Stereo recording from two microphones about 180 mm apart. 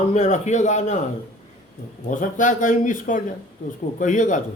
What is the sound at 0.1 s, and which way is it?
Speech, 40° left (ahead or behind).